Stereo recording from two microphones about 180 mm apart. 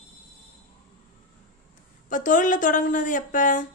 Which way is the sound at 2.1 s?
45° left (ahead or behind).